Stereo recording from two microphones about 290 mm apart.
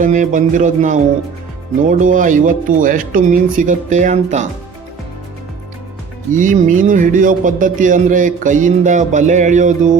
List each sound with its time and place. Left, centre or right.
0.0 s speech: right
6.3 s speech: right